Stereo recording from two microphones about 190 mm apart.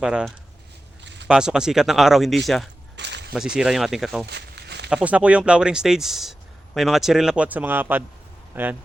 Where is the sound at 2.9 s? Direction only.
65° right (ahead or behind).